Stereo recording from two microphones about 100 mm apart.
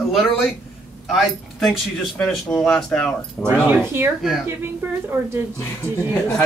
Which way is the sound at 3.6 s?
20° right (ahead or behind).